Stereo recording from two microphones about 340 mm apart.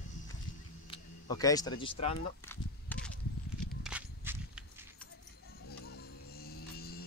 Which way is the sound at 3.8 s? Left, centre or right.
Centre.